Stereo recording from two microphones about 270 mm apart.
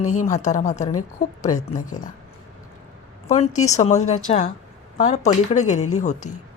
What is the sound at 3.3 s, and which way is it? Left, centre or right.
Speech, left.